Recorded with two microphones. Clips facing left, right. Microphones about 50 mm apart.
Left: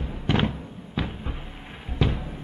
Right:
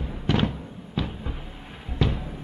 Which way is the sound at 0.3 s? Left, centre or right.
Centre.